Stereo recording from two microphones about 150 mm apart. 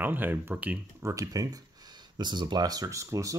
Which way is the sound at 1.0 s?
20° right (ahead or behind).